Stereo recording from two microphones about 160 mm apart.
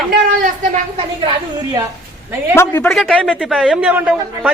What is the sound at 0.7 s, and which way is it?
Speech, 40° right (ahead or behind).